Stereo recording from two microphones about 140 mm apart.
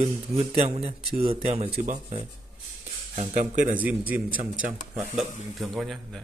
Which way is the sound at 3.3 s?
70° right (ahead or behind).